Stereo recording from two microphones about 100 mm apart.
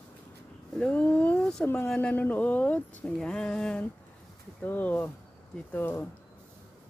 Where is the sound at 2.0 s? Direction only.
15° left (ahead or behind).